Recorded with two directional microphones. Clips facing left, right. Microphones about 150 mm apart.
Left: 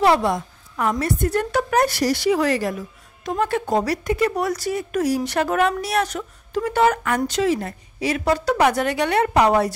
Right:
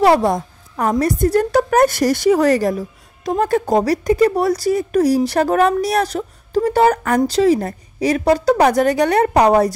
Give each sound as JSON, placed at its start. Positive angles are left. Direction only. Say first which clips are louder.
{"t": 0.0, "sound": "a woman's voice", "louder": "right 4 dB", "side_deg": -40}